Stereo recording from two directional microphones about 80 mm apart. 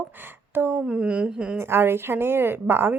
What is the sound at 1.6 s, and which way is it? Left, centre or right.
Speech, right.